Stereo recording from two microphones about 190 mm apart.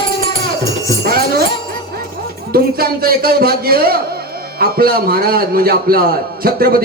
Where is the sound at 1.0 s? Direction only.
50° right (ahead or behind).